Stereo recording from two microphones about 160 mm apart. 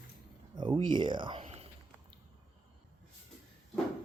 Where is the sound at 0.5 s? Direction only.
30° right (ahead or behind).